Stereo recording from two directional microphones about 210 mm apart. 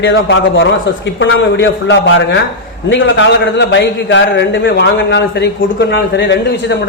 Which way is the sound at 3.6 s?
55° left (ahead or behind).